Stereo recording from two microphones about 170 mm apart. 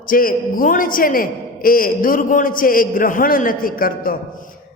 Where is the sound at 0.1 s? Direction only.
55° left (ahead or behind).